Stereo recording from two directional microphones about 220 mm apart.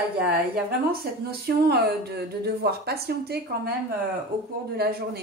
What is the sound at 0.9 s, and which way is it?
Speech, 45° right (ahead or behind).